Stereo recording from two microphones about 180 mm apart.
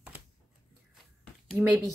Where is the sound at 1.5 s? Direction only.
Centre (ahead or behind).